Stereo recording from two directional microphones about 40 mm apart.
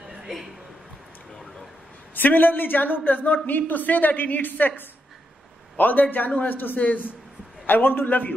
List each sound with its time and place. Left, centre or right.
2.1 s a woman's voice: left
3.4 s a woman's voice: left
6.8 s speech: left
7.6 s a woman's voice: left